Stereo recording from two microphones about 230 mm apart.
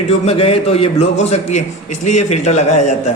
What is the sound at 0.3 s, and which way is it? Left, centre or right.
A man's voice, left.